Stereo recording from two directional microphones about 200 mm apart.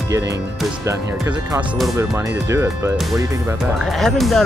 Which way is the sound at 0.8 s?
15° right (ahead or behind).